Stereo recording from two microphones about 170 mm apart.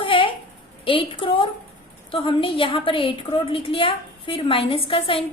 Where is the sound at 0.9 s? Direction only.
30° left (ahead or behind).